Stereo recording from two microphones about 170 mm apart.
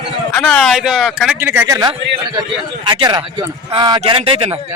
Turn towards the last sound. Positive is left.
turn(degrees=-35)  # may be behind; listen again after turning